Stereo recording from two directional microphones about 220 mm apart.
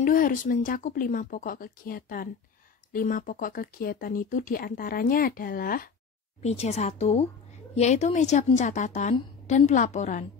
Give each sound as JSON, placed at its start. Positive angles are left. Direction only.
{"t": 0.0, "sound": "speech", "side_deg": 40}
{"t": 6.4, "sound": "a woman's voice", "side_deg": 30}